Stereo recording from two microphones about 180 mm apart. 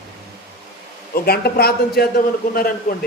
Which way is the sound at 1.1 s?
60° left (ahead or behind).